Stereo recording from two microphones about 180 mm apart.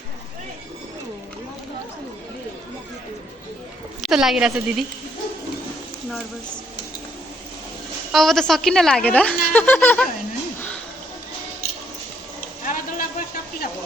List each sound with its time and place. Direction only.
4.0 s a woman's voice: centre (ahead or behind)
8.1 s a woman's voice: centre (ahead or behind)
12.6 s a sound: 50° left (ahead or behind)